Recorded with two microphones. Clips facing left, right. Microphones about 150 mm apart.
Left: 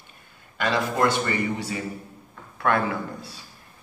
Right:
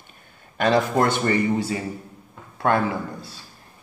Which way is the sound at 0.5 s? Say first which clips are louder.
Right 5 dB; 45° right (ahead or behind).